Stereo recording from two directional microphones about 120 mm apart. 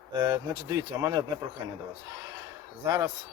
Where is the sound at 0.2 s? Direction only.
35° right (ahead or behind).